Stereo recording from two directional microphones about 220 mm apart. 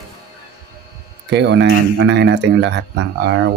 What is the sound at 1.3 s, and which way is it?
Speech, 50° right (ahead or behind).